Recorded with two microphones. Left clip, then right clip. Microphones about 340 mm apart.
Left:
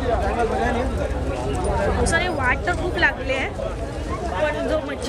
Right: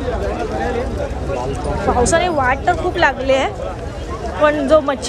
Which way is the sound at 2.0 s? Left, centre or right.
Centre.